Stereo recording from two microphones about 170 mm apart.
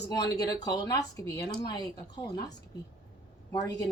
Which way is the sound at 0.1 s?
25° left (ahead or behind).